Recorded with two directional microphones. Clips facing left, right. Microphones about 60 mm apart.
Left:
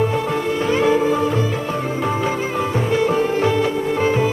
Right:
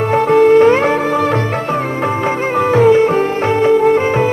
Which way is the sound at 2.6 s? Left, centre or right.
Right.